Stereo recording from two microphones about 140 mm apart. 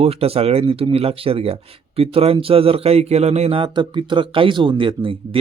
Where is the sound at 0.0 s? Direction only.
45° right (ahead or behind).